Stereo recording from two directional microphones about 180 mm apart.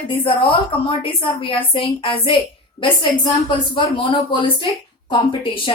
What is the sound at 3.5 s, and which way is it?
A woman's voice, 30° left (ahead or behind).